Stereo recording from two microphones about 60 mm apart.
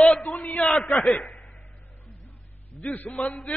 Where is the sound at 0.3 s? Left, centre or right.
Left.